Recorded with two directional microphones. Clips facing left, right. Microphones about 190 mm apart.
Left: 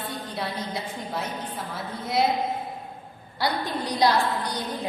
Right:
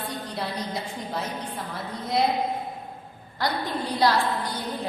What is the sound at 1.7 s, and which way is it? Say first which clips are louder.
Speech: right 2 dB; centre (ahead or behind).